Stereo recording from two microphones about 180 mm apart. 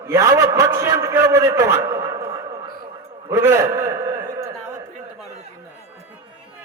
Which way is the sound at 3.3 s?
15° right (ahead or behind).